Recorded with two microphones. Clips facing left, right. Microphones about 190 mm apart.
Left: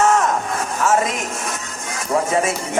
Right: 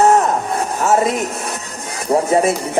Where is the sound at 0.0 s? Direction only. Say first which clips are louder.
Right 4 dB; 35° right (ahead or behind).